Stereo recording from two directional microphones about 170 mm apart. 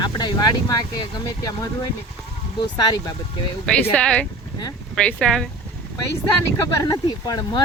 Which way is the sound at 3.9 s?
5° left (ahead or behind).